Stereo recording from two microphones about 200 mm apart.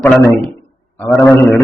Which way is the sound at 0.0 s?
10° left (ahead or behind).